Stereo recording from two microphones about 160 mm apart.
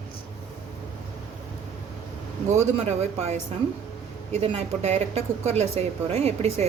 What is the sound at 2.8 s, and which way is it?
Speech, 45° right (ahead or behind).